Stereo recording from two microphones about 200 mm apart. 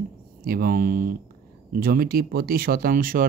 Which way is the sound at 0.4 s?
50° right (ahead or behind).